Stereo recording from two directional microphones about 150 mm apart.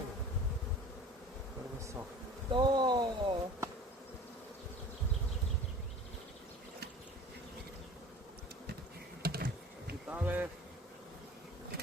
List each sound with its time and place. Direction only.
1.8 s bee: 20° right (ahead or behind)
2.5 s a sound: 30° right (ahead or behind)
9.2 s computer keyboard: 90° right
10.1 s insect: 10° right (ahead or behind)